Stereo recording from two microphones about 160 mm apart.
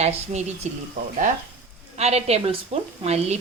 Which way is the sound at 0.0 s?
45° right (ahead or behind).